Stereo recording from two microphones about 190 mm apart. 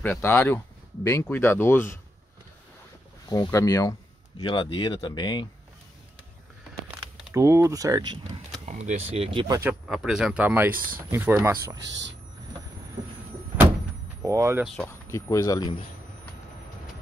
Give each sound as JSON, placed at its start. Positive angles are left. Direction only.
{"t": 0.0, "sound": "speech", "side_deg": 10}
{"t": 3.3, "sound": "speech", "side_deg": 15}
{"t": 7.3, "sound": "speech", "side_deg": -15}
{"t": 8.6, "sound": "a sound", "side_deg": -40}
{"t": 9.1, "sound": "speech", "side_deg": -30}
{"t": 9.8, "sound": "speech", "side_deg": 0}
{"t": 14.2, "sound": "speech", "side_deg": -15}
{"t": 14.9, "sound": "speech", "side_deg": 15}